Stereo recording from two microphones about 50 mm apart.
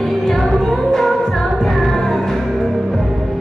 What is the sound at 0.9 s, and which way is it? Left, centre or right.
Music, centre.